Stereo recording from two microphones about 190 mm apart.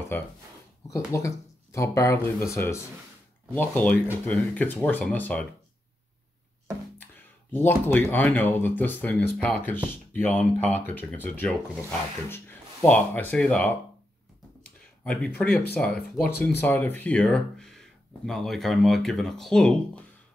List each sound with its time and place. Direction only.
0.8 s speech: 15° left (ahead or behind)
7.5 s speech: 10° left (ahead or behind)
15.0 s speech: 5° left (ahead or behind)
15.4 s speech: 50° left (ahead or behind)
15.7 s speech: 10° left (ahead or behind)